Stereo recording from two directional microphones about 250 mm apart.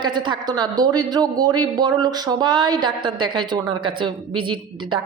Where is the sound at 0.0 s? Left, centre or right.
Centre.